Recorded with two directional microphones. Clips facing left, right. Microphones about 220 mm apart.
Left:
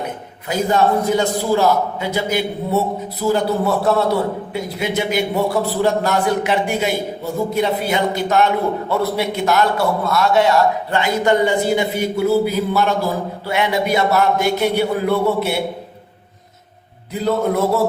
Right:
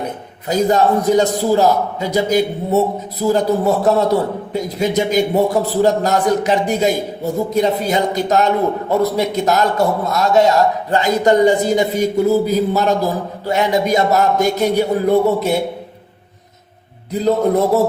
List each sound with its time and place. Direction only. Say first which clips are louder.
0.4 s a man's voice: right 3 dB; 40° right (ahead or behind)